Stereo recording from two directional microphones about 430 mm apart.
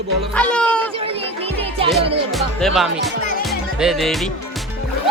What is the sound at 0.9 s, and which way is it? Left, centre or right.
Music, centre.